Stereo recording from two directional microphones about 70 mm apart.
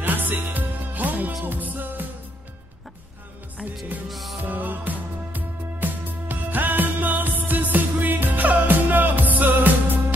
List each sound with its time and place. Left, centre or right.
0.0 s music: right
4.1 s music: centre
4.5 s music: right